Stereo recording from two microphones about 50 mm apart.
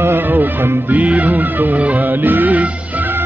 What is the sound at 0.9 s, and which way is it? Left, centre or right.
Music, right.